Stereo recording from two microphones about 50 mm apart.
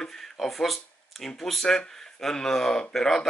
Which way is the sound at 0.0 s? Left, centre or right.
Centre.